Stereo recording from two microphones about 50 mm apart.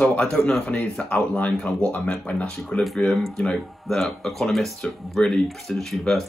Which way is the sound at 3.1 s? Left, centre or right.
Centre.